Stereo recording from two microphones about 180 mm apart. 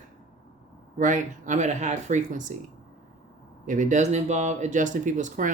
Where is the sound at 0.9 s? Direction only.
45° right (ahead or behind).